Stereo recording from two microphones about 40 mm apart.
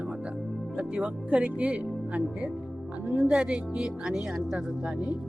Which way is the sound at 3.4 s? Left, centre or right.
Centre.